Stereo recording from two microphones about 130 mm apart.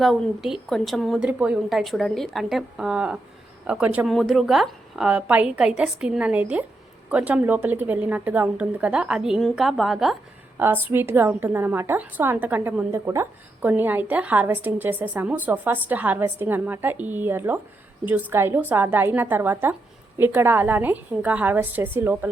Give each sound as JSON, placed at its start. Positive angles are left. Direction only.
{"t": 0.0, "sound": "a woman's voice", "side_deg": 0}
{"t": 4.1, "sound": "a woman's voice", "side_deg": 0}
{"t": 10.6, "sound": "a woman's voice", "side_deg": -15}